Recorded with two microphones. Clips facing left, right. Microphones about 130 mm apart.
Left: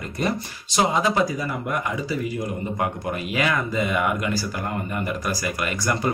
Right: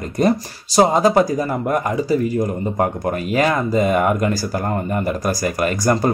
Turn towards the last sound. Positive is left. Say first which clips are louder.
# right 7 dB
turn(degrees=-40)  # may be behind; listen again after turning